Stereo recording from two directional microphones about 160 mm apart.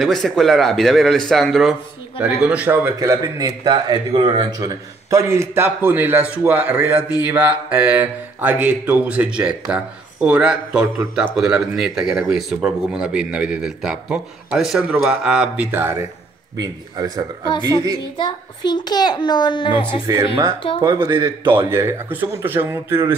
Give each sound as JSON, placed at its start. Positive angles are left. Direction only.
{"t": 0.0, "sound": "speech", "side_deg": 0}
{"t": 3.0, "sound": "speech", "side_deg": -25}
{"t": 16.5, "sound": "speech", "side_deg": -25}
{"t": 18.1, "sound": "a child's voice", "side_deg": 30}
{"t": 20.8, "sound": "speech", "side_deg": -20}